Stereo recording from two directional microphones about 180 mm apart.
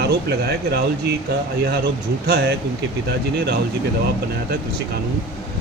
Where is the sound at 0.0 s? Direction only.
65° right (ahead or behind).